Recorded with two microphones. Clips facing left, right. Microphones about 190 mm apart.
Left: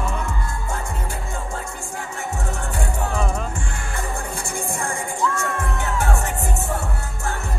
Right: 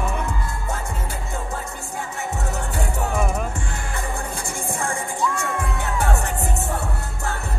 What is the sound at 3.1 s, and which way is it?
Music, 10° right (ahead or behind).